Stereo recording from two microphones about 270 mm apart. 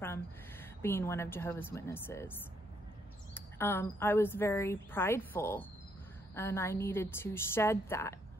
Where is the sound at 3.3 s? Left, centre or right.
Centre.